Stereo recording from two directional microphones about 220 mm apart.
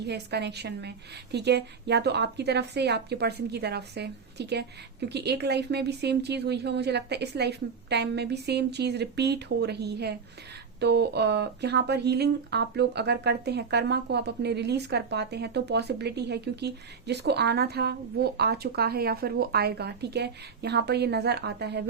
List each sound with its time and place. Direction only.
0.0 s speech: 50° right (ahead or behind)